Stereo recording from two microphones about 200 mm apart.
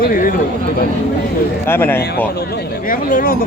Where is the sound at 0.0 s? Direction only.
45° left (ahead or behind).